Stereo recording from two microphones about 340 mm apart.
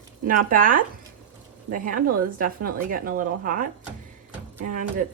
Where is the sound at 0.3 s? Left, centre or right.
Right.